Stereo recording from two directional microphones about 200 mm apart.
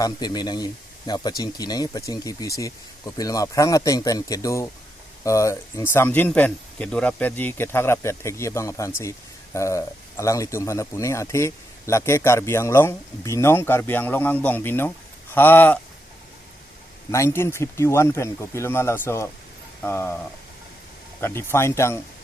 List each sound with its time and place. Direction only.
0.0 s speech: 20° left (ahead or behind)
17.1 s speech: 15° left (ahead or behind)
21.2 s speech: 10° left (ahead or behind)